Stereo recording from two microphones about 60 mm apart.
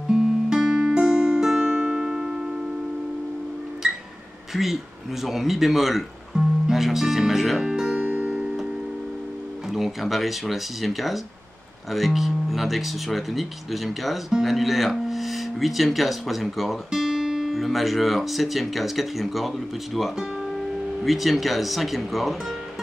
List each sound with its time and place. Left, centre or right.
0.1 s music: centre
4.5 s speech: centre
8.0 s music: right
8.3 s music: centre
9.7 s speech: centre